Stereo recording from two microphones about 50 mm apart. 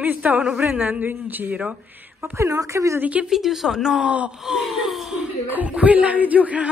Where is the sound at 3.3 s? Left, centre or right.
Centre.